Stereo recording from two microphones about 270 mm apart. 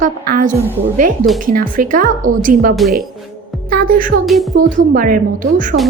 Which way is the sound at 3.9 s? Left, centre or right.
Right.